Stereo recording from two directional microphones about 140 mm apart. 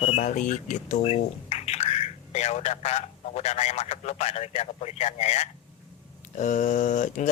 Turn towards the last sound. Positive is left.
turn(degrees=60)  # may be behind; listen again after turning